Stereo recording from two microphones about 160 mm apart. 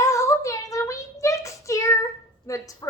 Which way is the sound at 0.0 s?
20° left (ahead or behind).